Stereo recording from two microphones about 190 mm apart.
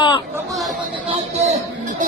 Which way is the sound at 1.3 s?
35° right (ahead or behind).